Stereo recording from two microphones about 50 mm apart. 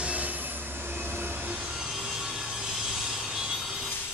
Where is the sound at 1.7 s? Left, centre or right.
Centre.